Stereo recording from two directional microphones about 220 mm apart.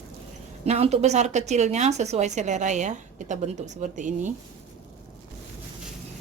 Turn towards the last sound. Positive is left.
turn(degrees=-35)  # may be behind; listen again after turning